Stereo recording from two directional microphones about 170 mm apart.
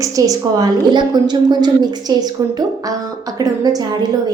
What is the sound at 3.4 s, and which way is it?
Speech, 25° right (ahead or behind).